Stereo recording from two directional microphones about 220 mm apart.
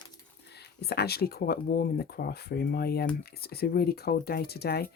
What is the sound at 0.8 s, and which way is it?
Speech, 45° left (ahead or behind).